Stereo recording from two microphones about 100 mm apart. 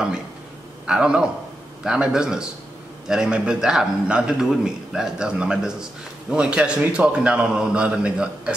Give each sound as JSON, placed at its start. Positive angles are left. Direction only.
{"t": 0.8, "sound": "a man's voice", "side_deg": -10}